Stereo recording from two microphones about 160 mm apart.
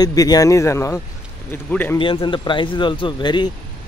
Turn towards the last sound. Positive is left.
turn(degrees=30)  # may be behind; listen again after turning